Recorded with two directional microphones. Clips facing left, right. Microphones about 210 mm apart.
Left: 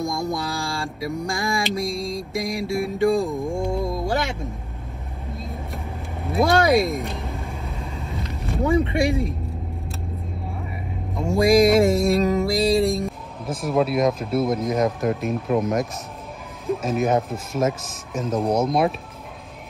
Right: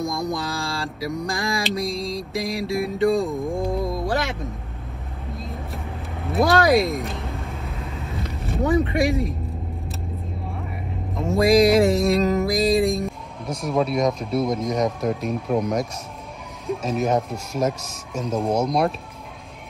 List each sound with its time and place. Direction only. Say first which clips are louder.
0.0 s music: even; centre (ahead or behind)
5.4 s vehicle: even; centre (ahead or behind)
8.3 s boat: even; centre (ahead or behind)
8.9 s speech: even; centre (ahead or behind)
11.1 s music: even; centre (ahead or behind)
16.6 s speech: left 1 dB; 5° left (ahead or behind)